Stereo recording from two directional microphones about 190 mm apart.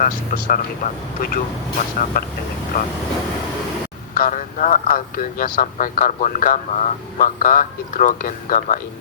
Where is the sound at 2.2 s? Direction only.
50° left (ahead or behind).